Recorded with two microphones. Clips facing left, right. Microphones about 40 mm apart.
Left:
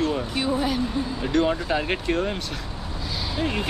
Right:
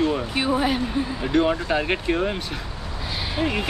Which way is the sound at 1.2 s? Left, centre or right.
Centre.